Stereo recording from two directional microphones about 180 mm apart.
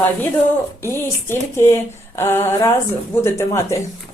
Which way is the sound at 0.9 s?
15° left (ahead or behind).